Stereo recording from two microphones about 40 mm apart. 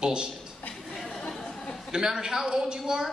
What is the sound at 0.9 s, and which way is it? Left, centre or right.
Chatter, centre.